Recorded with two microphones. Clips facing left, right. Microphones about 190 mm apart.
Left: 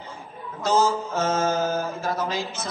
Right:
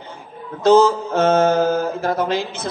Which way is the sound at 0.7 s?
60° right (ahead or behind).